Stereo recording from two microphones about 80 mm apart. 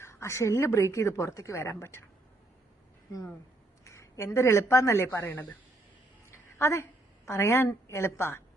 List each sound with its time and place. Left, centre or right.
0.0 s a woman's voice: left
3.8 s speech: left
6.3 s a sound: left
7.3 s a woman's voice: left